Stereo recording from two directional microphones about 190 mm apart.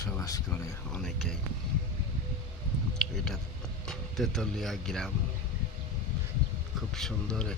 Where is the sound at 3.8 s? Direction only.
Centre (ahead or behind).